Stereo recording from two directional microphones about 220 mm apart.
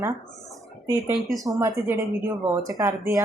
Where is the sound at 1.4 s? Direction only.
15° right (ahead or behind).